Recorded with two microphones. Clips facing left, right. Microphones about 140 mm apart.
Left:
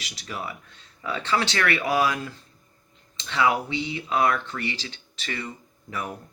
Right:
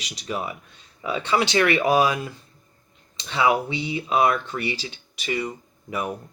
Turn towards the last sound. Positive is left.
turn(degrees=-15)  # may be behind; listen again after turning